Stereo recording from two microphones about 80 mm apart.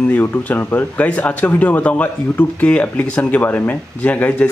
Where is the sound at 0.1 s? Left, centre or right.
Left.